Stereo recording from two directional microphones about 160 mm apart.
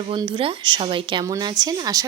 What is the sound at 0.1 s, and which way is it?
A woman's voice, 30° right (ahead or behind).